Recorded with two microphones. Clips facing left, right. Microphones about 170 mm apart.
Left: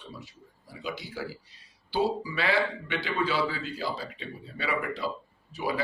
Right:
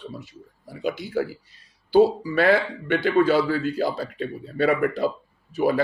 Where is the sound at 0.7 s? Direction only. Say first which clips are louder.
Right 10 dB; 50° right (ahead or behind).